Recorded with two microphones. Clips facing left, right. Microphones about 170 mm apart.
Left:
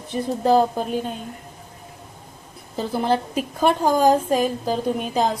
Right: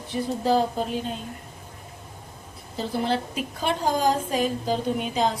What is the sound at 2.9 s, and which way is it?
A woman's voice, 45° left (ahead or behind).